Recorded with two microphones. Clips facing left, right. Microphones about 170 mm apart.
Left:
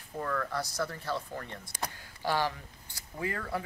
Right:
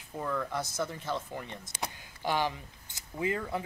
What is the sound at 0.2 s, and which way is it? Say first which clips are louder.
Speech: even; 15° right (ahead or behind).